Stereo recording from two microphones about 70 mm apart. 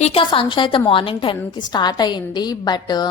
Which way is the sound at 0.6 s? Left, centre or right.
Left.